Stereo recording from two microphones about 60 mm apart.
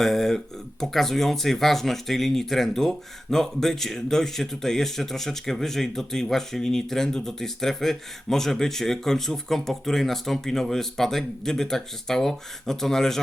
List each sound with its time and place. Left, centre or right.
0.0 s speech: centre